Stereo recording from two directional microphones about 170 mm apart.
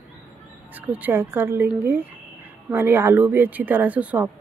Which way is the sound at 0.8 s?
10° right (ahead or behind).